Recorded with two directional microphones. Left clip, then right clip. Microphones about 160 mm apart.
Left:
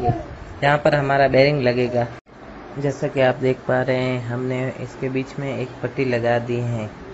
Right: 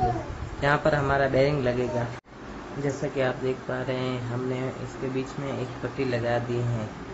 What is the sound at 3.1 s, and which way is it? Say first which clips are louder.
Speech: left 11 dB; 30° left (ahead or behind).